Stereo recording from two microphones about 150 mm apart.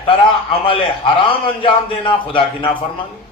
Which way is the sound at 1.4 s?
35° left (ahead or behind).